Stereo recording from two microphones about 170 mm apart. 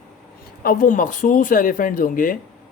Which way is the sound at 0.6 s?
55° left (ahead or behind).